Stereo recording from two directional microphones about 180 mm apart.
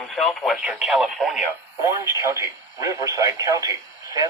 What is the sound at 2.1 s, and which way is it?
Speech, 15° right (ahead or behind).